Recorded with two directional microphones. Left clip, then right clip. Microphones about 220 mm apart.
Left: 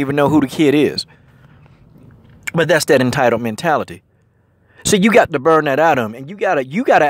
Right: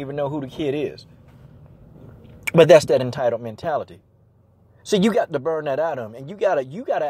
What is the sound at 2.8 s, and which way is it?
Speech, 30° left (ahead or behind).